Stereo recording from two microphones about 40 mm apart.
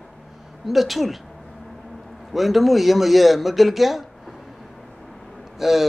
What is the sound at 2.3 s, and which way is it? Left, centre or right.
Speech, centre.